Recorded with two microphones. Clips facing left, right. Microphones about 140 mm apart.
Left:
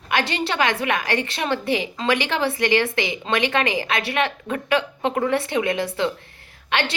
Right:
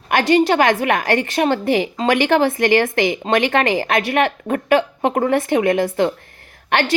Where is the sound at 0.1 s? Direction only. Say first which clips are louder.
Right 9 dB; 45° right (ahead or behind).